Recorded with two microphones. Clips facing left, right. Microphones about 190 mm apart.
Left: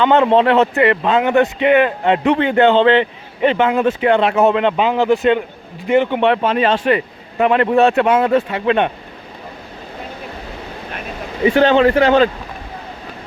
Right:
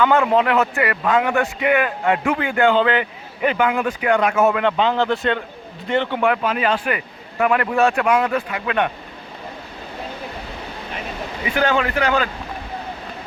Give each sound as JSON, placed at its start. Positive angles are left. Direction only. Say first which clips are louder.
{"t": 0.0, "sound": "a man's voice", "louder": "left 4 dB", "side_deg": 25}
{"t": 11.4, "sound": "a man's voice", "louder": "left 9 dB", "side_deg": 25}